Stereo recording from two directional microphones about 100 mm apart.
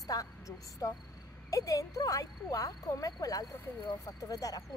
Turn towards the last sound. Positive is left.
turn(degrees=35)  # may be behind; listen again after turning